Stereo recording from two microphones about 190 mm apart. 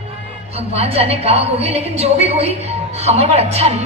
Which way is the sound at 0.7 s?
35° right (ahead or behind).